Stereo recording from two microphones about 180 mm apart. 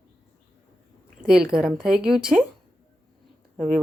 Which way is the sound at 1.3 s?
5° right (ahead or behind).